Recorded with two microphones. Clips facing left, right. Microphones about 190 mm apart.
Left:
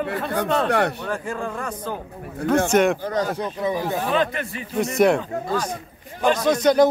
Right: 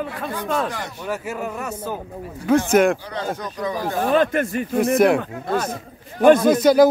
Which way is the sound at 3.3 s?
25° left (ahead or behind).